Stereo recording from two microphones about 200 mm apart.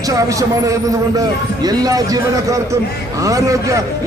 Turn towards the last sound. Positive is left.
turn(degrees=-15)  # may be behind; listen again after turning